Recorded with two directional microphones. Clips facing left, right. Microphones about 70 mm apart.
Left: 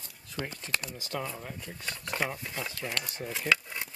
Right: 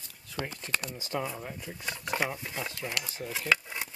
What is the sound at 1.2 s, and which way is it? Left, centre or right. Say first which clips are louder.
Speech: right 2 dB; centre.